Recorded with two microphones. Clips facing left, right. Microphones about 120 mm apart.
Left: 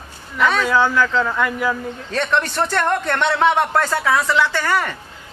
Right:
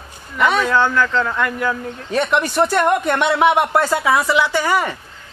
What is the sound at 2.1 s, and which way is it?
Speech, 10° right (ahead or behind).